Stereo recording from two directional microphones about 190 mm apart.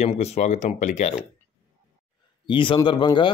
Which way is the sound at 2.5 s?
25° left (ahead or behind).